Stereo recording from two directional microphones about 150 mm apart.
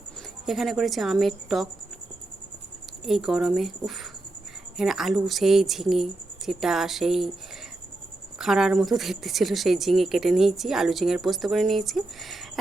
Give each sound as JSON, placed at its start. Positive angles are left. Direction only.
{"t": 0.4, "sound": "speech", "side_deg": 0}
{"t": 3.0, "sound": "speech", "side_deg": 0}
{"t": 8.4, "sound": "speech", "side_deg": -5}